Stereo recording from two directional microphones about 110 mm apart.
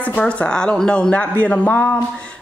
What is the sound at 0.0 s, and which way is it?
Speech, 10° left (ahead or behind).